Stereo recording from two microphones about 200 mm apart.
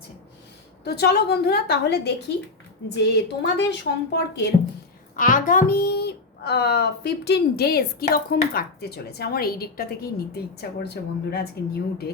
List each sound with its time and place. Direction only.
0.9 s a woman's voice: 55° left (ahead or behind)
5.1 s speech: 40° left (ahead or behind)